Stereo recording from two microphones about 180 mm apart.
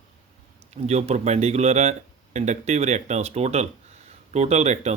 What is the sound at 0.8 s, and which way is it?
Speech, 35° right (ahead or behind).